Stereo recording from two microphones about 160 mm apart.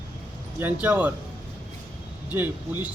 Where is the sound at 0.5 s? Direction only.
10° right (ahead or behind).